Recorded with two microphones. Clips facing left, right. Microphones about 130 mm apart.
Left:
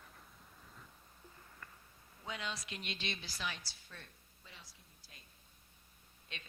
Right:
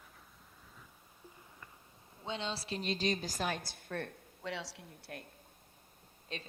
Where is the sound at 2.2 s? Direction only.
30° right (ahead or behind); by 5.3 s 65° right (ahead or behind).